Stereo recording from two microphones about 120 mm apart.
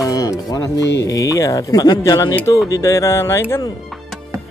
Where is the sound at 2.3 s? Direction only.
20° left (ahead or behind).